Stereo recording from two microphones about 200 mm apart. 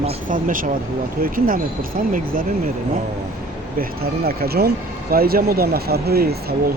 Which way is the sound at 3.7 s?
50° right (ahead or behind).